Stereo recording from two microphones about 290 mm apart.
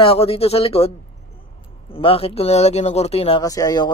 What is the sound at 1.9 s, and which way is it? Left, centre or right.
Speech, centre.